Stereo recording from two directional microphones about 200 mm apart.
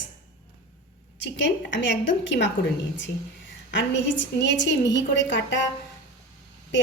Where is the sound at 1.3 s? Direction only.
65° left (ahead or behind).